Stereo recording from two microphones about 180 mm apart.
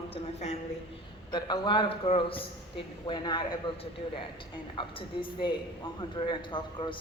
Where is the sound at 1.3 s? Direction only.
25° left (ahead or behind).